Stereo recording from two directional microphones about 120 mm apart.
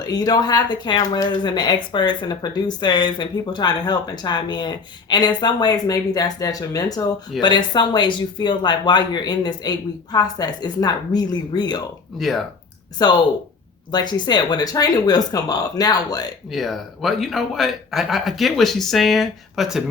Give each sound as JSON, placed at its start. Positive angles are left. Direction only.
{"t": 0.0, "sound": "speech", "side_deg": 35}
{"t": 13.0, "sound": "speech", "side_deg": 35}
{"t": 16.5, "sound": "speech", "side_deg": 0}